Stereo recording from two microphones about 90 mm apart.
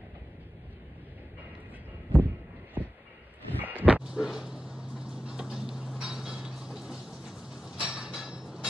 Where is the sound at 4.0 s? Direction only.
5° right (ahead or behind).